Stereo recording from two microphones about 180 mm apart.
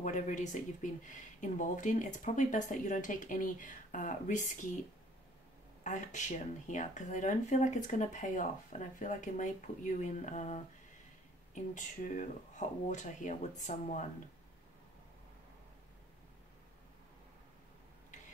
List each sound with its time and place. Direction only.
0.0 s speech: 40° left (ahead or behind)
5.9 s speech: 40° left (ahead or behind)